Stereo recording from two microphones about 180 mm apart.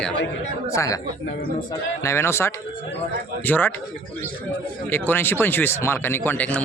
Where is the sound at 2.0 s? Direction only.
15° left (ahead or behind).